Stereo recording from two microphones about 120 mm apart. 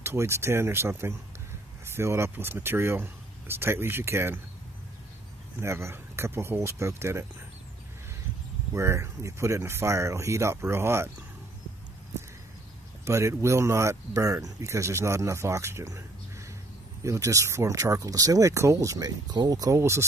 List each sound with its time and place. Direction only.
0.0 s speech: 20° right (ahead or behind)
5.6 s speech: 25° right (ahead or behind)
8.7 s speech: 25° right (ahead or behind)
13.0 s speech: 25° right (ahead or behind)
17.0 s speech: 25° right (ahead or behind)